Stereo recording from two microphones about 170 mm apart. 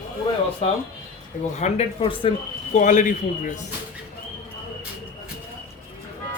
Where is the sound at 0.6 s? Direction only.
35° left (ahead or behind).